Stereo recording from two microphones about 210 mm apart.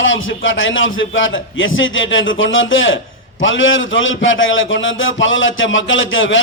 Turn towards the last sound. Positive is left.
turn(degrees=65)  # may be behind; listen again after turning